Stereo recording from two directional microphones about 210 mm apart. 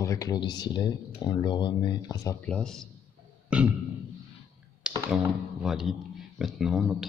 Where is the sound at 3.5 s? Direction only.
5° right (ahead or behind).